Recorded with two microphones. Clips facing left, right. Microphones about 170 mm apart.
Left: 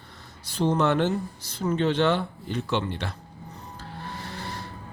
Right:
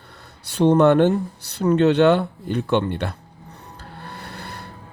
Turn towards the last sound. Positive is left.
turn(degrees=-60)  # may be behind; listen again after turning